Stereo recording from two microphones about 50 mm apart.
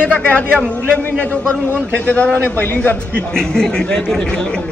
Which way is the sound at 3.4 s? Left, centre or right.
Centre.